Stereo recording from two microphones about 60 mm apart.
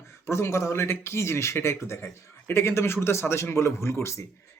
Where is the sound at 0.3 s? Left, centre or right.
Left.